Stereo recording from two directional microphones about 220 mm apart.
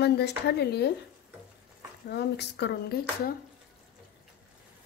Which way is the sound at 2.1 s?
50° left (ahead or behind).